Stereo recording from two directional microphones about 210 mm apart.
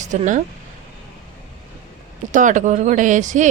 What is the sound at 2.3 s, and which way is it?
A woman's voice, 35° right (ahead or behind).